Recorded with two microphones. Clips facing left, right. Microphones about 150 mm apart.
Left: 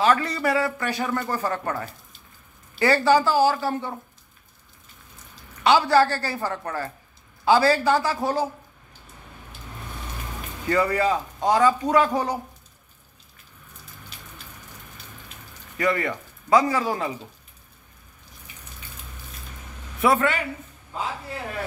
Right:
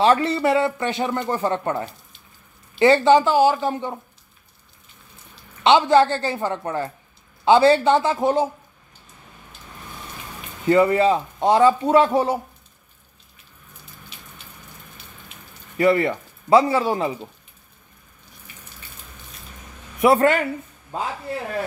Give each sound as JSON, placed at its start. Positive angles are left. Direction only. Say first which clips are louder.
{"t": 0.0, "sound": "speech", "louder": "right 4 dB", "side_deg": -30}
{"t": 5.6, "sound": "speech", "louder": "right 3 dB", "side_deg": -20}
{"t": 10.7, "sound": "speech", "louder": "right 6 dB", "side_deg": -25}
{"t": 15.8, "sound": "speech", "louder": "right 6 dB", "side_deg": -25}
{"t": 20.2, "sound": "speech", "louder": "right 6 dB", "side_deg": -45}